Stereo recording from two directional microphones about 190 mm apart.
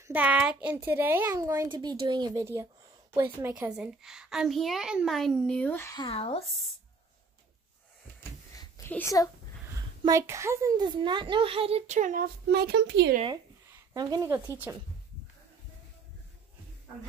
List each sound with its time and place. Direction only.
0.0 s a child's voice: 10° right (ahead or behind); by 5.9 s 10° left (ahead or behind)
5.9 s speech: 30° left (ahead or behind)
8.2 s a sound: 15° left (ahead or behind)
10.0 s a child's voice: 15° right (ahead or behind); by 12.3 s 40° right (ahead or behind)
12.4 s speech: 60° right (ahead or behind)
13.7 s a sound: 20° right (ahead or behind)
14.7 s a child's voice: 15° right (ahead or behind)